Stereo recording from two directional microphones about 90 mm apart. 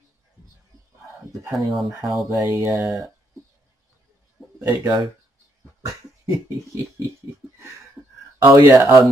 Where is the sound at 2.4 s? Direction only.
30° right (ahead or behind).